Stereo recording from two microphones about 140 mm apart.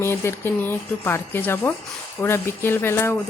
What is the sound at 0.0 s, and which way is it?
Speech, 15° left (ahead or behind).